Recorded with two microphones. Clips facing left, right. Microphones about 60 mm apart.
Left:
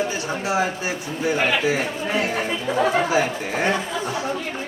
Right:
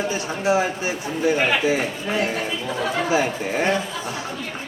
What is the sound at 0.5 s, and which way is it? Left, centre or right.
Speech, right.